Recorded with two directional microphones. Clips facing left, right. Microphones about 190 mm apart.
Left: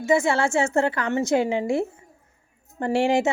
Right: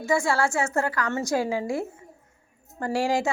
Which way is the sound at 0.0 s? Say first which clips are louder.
Left 3 dB; 20° left (ahead or behind).